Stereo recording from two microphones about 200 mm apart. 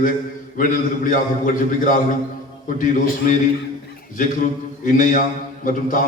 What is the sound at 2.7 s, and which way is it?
Speech, 40° left (ahead or behind).